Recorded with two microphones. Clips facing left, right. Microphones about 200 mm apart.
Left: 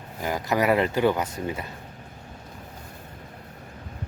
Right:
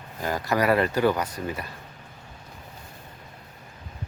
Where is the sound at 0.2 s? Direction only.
15° left (ahead or behind).